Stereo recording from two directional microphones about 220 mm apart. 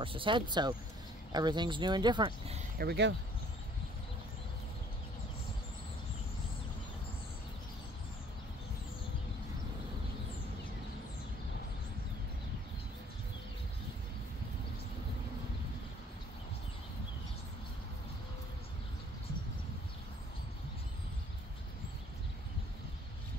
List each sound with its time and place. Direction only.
0.0 s speech: 25° right (ahead or behind)
2.8 s speech: 50° right (ahead or behind)